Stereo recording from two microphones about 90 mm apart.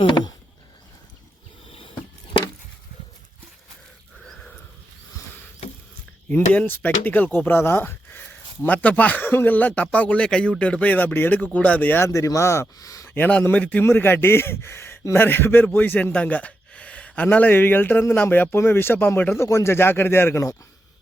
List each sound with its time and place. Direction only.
4.2 s a sound: 5° left (ahead or behind)
6.2 s speech: 15° left (ahead or behind); by 13.1 s 35° left (ahead or behind)
13.1 s a man's voice: 20° left (ahead or behind)